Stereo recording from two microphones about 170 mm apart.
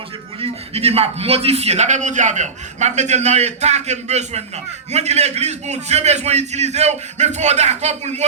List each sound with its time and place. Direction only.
0.3 s a man's voice: 35° right (ahead or behind)